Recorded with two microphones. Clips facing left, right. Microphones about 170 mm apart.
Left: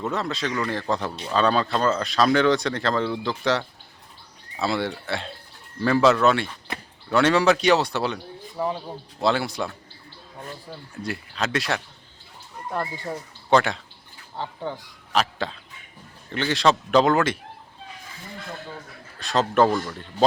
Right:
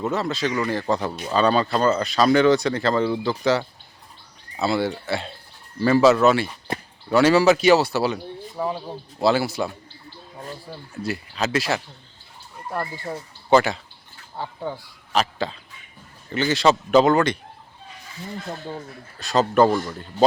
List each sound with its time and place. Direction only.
0.0 s speech: centre (ahead or behind)
10.7 s speech: 5° right (ahead or behind)
15.1 s a sound: centre (ahead or behind)
16.3 s speech: centre (ahead or behind)
19.2 s speech: centre (ahead or behind)